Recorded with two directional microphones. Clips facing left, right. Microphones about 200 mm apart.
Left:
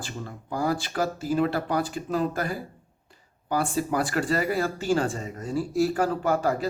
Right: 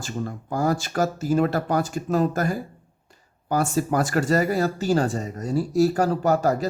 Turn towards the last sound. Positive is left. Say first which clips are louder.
# right 4 dB
turn(degrees=-40)  # may be behind; listen again after turning